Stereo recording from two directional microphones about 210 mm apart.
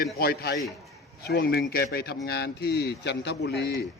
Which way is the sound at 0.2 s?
45° left (ahead or behind).